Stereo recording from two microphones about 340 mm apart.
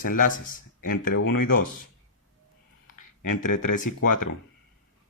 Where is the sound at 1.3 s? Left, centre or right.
Left.